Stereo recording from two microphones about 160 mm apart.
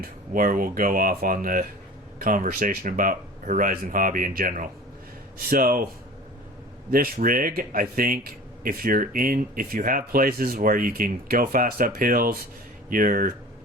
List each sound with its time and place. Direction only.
0.0 s speech: 60° right (ahead or behind)
6.9 s speech: 65° right (ahead or behind)